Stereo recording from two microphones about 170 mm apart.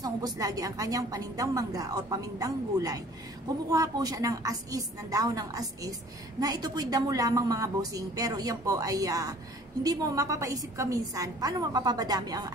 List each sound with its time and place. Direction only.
0.0 s a woman's voice: 20° right (ahead or behind)